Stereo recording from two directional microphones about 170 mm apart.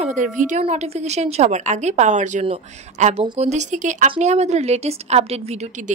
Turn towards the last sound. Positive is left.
turn(degrees=-40)  # may be behind; listen again after turning